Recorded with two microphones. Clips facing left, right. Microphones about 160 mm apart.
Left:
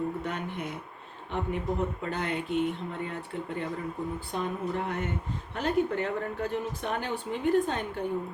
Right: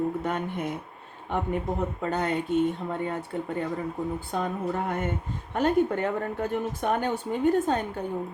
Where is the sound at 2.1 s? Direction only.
45° right (ahead or behind).